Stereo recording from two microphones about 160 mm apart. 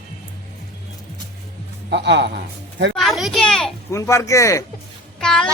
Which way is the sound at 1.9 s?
90° right.